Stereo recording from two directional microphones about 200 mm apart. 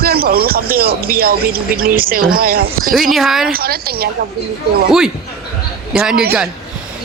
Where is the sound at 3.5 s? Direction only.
50° right (ahead or behind).